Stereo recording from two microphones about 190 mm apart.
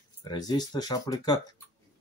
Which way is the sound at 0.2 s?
20° left (ahead or behind).